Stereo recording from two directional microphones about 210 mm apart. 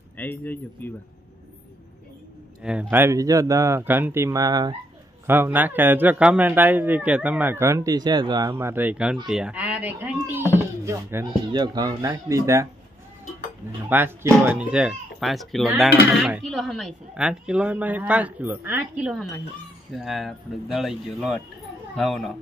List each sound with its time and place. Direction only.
0.2 s speech: 10° left (ahead or behind)
2.8 s a man's voice: 10° right (ahead or behind)
13.8 s speech: 10° right (ahead or behind)